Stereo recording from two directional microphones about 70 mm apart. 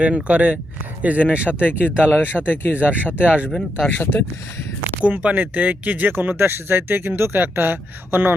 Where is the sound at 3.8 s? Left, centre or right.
Left.